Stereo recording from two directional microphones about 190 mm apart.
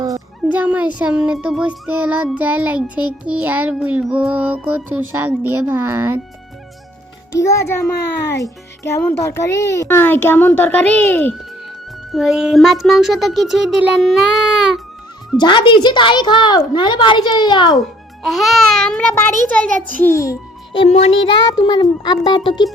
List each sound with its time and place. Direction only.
0.5 s child singing: 10° right (ahead or behind)
7.3 s a child's voice: 15° left (ahead or behind)
12.1 s a sound: centre (ahead or behind)
15.4 s a woman's voice: 25° left (ahead or behind)
17.7 s a sound: centre (ahead or behind); by 20.4 s 15° left (ahead or behind)
20.7 s music: 35° left (ahead or behind)
21.4 s a woman's voice: 20° left (ahead or behind)